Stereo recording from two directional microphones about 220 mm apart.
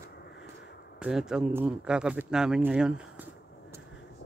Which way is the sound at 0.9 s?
5° right (ahead or behind).